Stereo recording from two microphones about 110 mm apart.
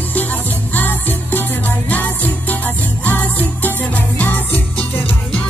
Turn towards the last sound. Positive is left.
turn(degrees=15)  # may be behind; listen again after turning